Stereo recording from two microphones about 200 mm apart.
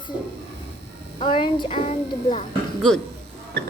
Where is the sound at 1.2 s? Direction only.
25° left (ahead or behind).